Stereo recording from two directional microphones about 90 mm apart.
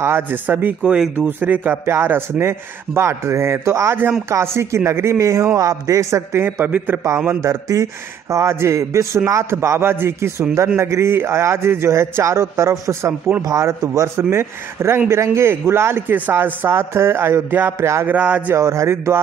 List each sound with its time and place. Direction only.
0.0 s a man's voice: 25° right (ahead or behind)
6.6 s a man's voice: 20° right (ahead or behind)
7.2 s a man's voice: 35° right (ahead or behind)
18.0 s speech: 15° right (ahead or behind)
18.6 s a man's voice: 35° right (ahead or behind)